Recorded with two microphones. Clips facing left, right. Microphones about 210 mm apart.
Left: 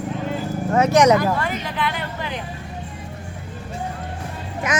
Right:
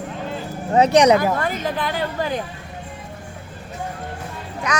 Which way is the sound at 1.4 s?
40° right (ahead or behind).